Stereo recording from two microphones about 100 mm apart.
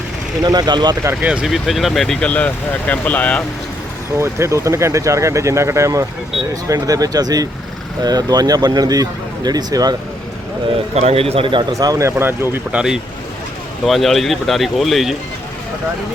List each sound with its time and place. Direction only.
0.4 s speech: 45° right (ahead or behind)
1.2 s speech: 10° right (ahead or behind)
1.5 s speech: centre (ahead or behind); by 3.4 s 15° left (ahead or behind)
4.2 s speech: 30° right (ahead or behind)
10.9 s a man's voice: 85° right; by 11.6 s 65° right (ahead or behind)
11.7 s speech: 35° right (ahead or behind)
12.1 s speech: 25° right (ahead or behind)
12.7 s speech: 5° right (ahead or behind)